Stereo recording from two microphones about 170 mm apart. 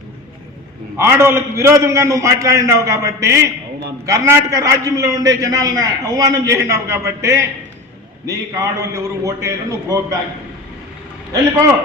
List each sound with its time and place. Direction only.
0.9 s a man's voice: 15° right (ahead or behind)